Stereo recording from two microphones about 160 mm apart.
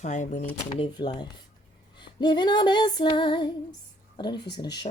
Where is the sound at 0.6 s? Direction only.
35° left (ahead or behind).